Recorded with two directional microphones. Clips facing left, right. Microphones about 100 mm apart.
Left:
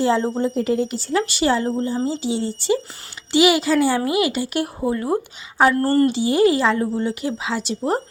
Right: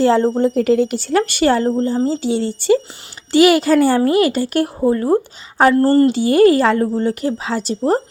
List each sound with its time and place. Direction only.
0.0 s speech: 55° right (ahead or behind)
0.4 s a woman's voice: 70° right (ahead or behind); by 6.1 s 30° right (ahead or behind)
6.1 s speech: 50° right (ahead or behind)